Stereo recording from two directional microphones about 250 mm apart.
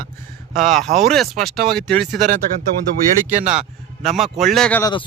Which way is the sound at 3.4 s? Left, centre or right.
Centre.